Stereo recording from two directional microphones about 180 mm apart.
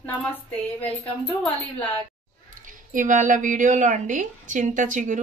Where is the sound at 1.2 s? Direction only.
5° left (ahead or behind).